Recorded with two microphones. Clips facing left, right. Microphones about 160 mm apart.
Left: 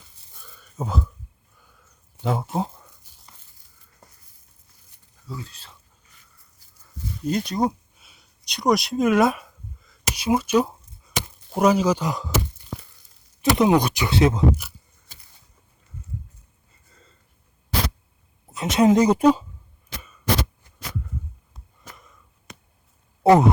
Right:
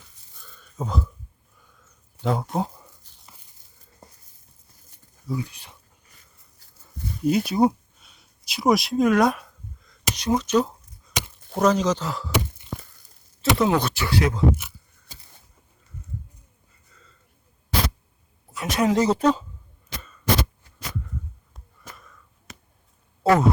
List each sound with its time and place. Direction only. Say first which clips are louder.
0.4 s a sound: left 1 dB; 5° left (ahead or behind)
2.2 s speech: even; centre (ahead or behind)
3.2 s tearing: right 1 dB; 10° right (ahead or behind)
5.2 s speech: right 7 dB; 15° right (ahead or behind)
7.3 s speech: right 4 dB; 5° right (ahead or behind)
7.9 s a sound: even; 5° left (ahead or behind)
11.5 s speech: left 2 dB; 10° left (ahead or behind)
13.6 s speech: left 4 dB; 15° left (ahead or behind)
16.9 s a sound: left 1 dB; 35° left (ahead or behind)
18.5 s speech: left 4 dB; 20° left (ahead or behind)
21.8 s a sound: right 1 dB; 20° left (ahead or behind)
23.2 s speech: left 4 dB; 20° left (ahead or behind)